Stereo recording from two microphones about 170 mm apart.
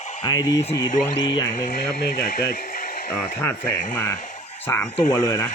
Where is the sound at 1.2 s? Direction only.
25° left (ahead or behind).